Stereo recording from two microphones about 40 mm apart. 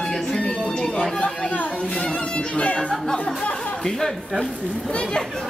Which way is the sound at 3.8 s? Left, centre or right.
Centre.